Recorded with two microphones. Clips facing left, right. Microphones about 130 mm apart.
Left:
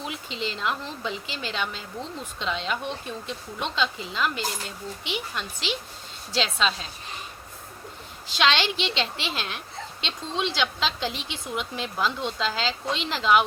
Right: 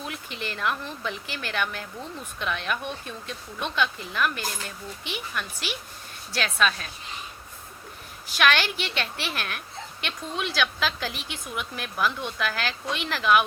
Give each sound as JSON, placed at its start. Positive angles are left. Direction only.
{"t": 0.0, "sound": "speech", "side_deg": 20}
{"t": 8.4, "sound": "speech", "side_deg": 20}